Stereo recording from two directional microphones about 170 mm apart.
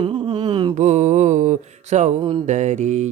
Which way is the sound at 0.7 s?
45° right (ahead or behind).